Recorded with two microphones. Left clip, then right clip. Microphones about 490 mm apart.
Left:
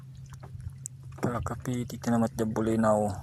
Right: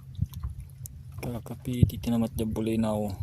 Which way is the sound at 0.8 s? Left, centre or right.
Right.